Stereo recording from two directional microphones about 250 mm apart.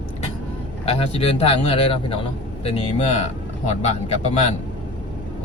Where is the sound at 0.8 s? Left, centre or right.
Left.